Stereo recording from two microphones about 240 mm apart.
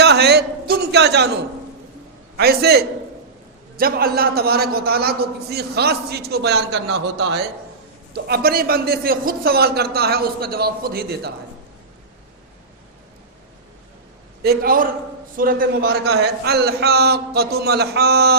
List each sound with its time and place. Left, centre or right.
0.0 s a man's voice: right
14.4 s a man's voice: right